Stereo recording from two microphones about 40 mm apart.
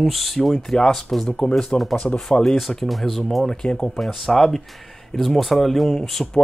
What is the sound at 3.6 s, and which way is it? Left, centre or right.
Speech, left.